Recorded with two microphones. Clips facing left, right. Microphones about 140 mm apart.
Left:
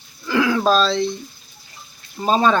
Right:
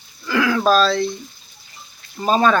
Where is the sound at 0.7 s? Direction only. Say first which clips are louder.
Right 1 dB; 25° left (ahead or behind).